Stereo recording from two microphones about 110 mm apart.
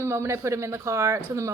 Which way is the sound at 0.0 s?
25° right (ahead or behind).